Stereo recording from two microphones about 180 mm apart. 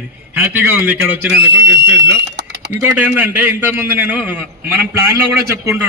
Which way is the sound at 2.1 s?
75° right (ahead or behind).